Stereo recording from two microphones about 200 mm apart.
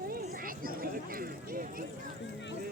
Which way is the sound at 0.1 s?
50° right (ahead or behind).